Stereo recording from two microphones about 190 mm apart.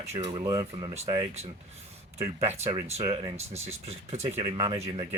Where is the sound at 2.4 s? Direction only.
35° right (ahead or behind).